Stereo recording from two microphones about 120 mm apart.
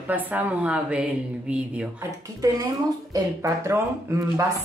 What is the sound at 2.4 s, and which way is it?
A woman's voice, 30° right (ahead or behind).